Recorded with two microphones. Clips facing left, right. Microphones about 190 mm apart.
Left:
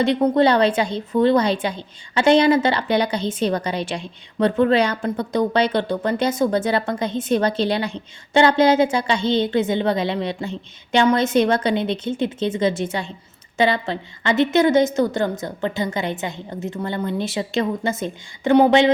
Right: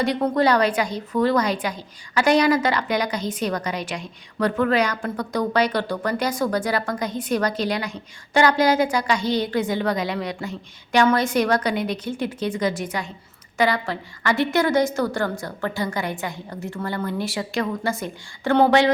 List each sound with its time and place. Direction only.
0.0 s a woman's voice: 25° left (ahead or behind)